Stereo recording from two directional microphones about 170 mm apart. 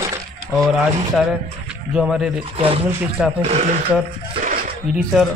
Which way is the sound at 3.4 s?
40° right (ahead or behind).